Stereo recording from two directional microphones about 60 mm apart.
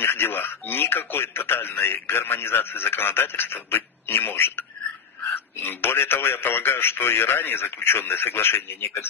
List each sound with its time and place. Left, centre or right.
0.0 s speech: left